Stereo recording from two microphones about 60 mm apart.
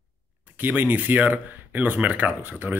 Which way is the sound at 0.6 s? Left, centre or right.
Right.